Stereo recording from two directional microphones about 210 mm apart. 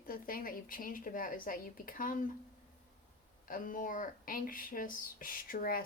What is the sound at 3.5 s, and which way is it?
Speech, 40° left (ahead or behind).